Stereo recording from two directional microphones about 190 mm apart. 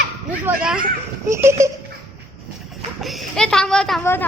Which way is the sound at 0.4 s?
5° right (ahead or behind).